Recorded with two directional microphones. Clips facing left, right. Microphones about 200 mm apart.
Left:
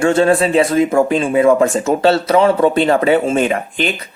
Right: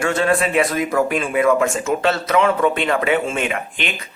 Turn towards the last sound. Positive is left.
turn(degrees=35)  # may be behind; listen again after turning